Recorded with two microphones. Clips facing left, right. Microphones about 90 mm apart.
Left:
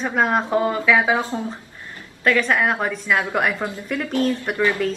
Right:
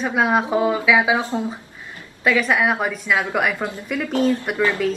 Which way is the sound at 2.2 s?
5° right (ahead or behind).